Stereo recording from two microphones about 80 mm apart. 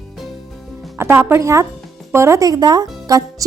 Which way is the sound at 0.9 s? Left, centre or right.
Right.